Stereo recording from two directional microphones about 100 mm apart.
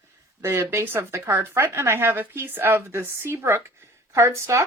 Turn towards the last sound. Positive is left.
turn(degrees=-30)  # may be behind; listen again after turning